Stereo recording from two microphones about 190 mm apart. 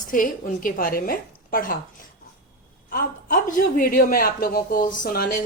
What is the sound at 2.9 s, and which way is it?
A man's voice, 50° left (ahead or behind).